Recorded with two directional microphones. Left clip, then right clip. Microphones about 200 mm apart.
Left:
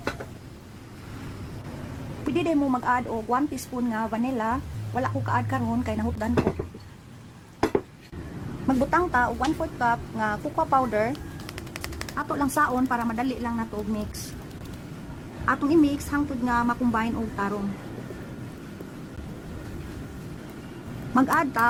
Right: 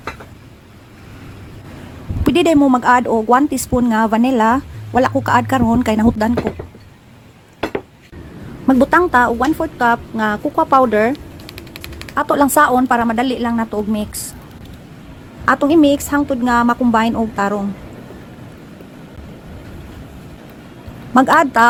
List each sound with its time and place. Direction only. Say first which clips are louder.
2.2 s speech: right 12 dB; 40° right (ahead or behind)
8.6 s speech: right 11 dB; 30° right (ahead or behind)
12.1 s speech: right 13 dB; 35° right (ahead or behind)
15.4 s speech: right 10 dB; 35° right (ahead or behind)
21.2 s speech: right 11 dB; 35° right (ahead or behind)